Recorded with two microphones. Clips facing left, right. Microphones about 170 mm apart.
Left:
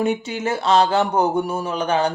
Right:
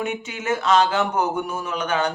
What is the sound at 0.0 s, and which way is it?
Speech, 35° left (ahead or behind).